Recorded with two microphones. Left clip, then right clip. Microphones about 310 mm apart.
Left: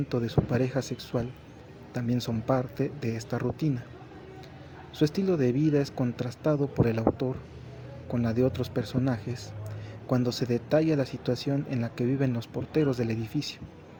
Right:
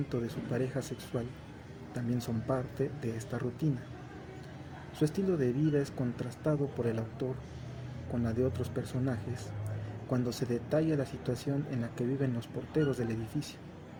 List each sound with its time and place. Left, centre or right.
0.1 s speech: left
4.9 s speech: left